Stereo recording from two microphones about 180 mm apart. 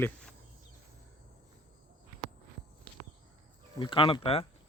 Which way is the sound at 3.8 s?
30° left (ahead or behind).